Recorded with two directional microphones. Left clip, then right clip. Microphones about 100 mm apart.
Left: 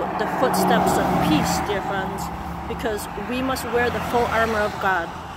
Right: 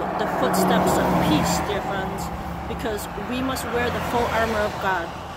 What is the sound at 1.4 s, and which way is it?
Speech, 55° right (ahead or behind).